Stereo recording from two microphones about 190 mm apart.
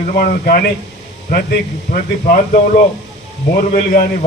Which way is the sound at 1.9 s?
45° left (ahead or behind).